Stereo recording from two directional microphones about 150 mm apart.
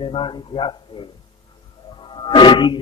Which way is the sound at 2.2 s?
30° left (ahead or behind).